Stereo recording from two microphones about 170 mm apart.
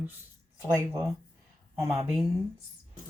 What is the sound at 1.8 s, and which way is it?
Speech, centre (ahead or behind).